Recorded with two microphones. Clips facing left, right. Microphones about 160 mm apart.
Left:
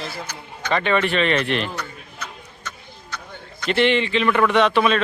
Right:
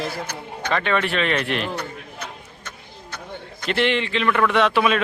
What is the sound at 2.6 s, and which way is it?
Vehicle, 55° right (ahead or behind).